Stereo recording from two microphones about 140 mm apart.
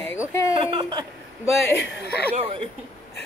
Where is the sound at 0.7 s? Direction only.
35° right (ahead or behind).